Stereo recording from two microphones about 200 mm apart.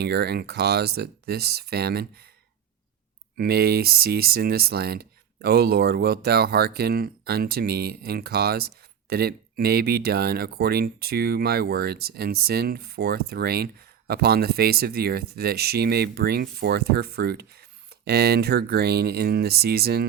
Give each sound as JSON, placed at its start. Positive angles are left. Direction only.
{"t": 0.0, "sound": "speech", "side_deg": -55}
{"t": 3.3, "sound": "speech", "side_deg": -50}